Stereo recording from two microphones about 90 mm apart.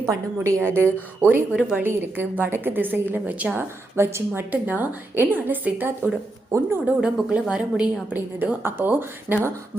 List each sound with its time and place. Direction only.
0.0 s a woman's voice: 30° right (ahead or behind); by 3.7 s 15° right (ahead or behind)
3.9 s a woman's voice: 25° right (ahead or behind)